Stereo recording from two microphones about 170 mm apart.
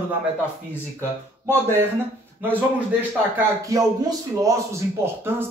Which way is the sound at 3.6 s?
20° right (ahead or behind).